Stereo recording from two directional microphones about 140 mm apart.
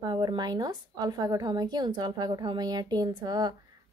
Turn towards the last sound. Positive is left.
turn(degrees=-30)  # may be behind; listen again after turning